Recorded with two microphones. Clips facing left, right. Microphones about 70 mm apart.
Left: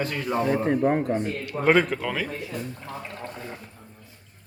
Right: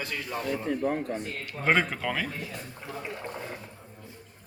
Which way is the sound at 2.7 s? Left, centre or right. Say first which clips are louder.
Left 1 dB; centre.